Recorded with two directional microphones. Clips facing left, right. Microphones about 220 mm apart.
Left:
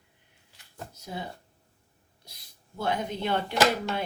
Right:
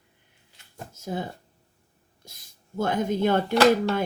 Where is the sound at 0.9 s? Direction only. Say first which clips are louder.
Right 7 dB; 45° right (ahead or behind).